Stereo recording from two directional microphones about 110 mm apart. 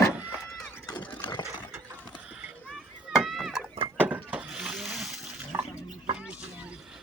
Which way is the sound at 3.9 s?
15° right (ahead or behind).